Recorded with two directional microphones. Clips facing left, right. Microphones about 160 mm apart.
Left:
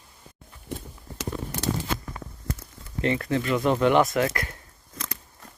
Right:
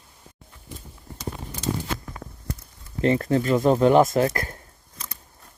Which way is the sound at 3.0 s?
35° right (ahead or behind).